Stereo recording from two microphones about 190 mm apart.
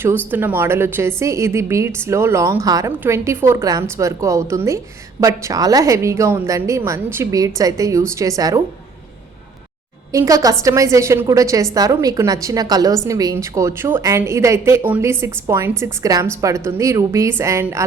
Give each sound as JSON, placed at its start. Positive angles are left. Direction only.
{"t": 0.3, "sound": "a woman's voice", "side_deg": -10}
{"t": 10.1, "sound": "a woman's voice", "side_deg": -15}